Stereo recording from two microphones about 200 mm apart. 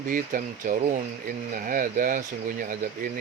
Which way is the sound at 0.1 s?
45° right (ahead or behind).